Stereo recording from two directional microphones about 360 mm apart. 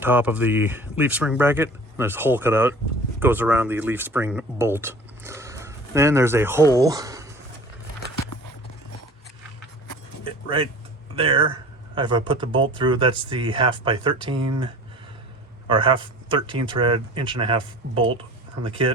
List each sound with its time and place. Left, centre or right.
0.0 s speech: centre
10.2 s a sound: centre
11.1 s speech: centre
15.7 s speech: centre
17.9 s speech: right
18.6 s speech: centre